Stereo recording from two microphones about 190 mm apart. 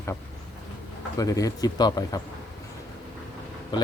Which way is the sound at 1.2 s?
20° left (ahead or behind).